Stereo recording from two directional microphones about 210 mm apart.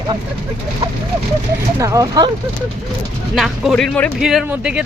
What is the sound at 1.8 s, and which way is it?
Speech, 15° right (ahead or behind).